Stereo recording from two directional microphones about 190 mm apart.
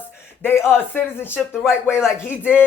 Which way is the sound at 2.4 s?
5° right (ahead or behind).